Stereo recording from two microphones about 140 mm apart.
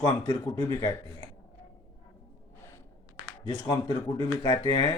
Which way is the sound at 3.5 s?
35° left (ahead or behind).